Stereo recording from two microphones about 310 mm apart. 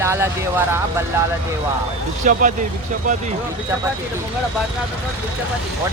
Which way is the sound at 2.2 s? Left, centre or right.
Right.